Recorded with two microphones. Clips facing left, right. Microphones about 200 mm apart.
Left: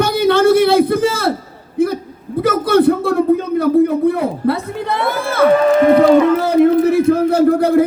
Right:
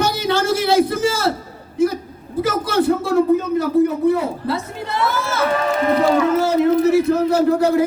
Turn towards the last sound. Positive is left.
turn(degrees=55)  # may be behind; listen again after turning